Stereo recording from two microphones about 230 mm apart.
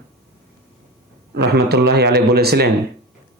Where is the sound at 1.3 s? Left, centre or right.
Right.